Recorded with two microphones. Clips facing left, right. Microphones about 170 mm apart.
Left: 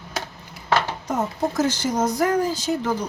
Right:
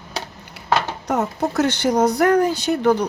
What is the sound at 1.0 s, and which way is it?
Speech, 70° right (ahead or behind).